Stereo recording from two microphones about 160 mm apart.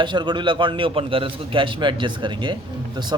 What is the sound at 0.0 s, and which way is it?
Speech, 30° right (ahead or behind).